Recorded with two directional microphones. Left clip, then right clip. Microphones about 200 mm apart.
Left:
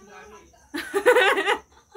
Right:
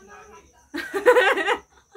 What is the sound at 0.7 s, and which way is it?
Snicker, centre (ahead or behind).